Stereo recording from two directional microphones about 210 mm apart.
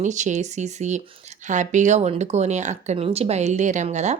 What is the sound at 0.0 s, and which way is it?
Speech, 35° right (ahead or behind).